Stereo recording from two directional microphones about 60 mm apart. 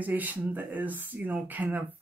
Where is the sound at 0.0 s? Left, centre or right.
Right.